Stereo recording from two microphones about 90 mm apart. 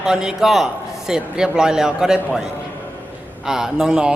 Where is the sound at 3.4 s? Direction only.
5° right (ahead or behind).